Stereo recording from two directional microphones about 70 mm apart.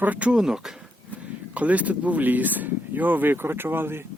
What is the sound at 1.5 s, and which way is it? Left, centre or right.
Speech, right.